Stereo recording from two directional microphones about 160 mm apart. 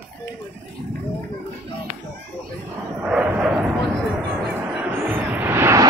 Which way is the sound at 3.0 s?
5° right (ahead or behind).